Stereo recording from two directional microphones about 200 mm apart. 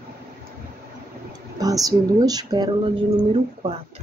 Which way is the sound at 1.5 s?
20° right (ahead or behind).